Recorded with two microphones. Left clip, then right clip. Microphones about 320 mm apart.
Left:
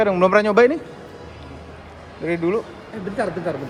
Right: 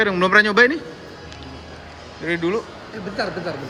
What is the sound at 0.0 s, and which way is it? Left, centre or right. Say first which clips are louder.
Speech: even; centre.